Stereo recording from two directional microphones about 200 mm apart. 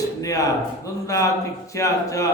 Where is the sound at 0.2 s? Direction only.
15° left (ahead or behind).